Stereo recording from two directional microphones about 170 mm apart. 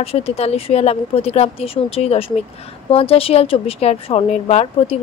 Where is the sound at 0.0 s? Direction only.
35° left (ahead or behind).